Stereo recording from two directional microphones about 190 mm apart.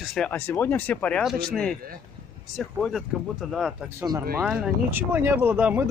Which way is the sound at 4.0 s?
15° right (ahead or behind).